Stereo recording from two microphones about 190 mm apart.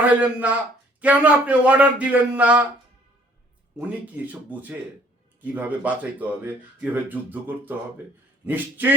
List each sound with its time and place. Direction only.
0.2 s speech: 5° right (ahead or behind)
3.8 s speech: 10° right (ahead or behind)